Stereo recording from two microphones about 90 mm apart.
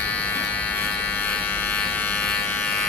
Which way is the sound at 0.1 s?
15° left (ahead or behind).